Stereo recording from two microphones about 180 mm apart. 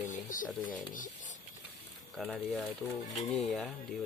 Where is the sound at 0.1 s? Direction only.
45° left (ahead or behind).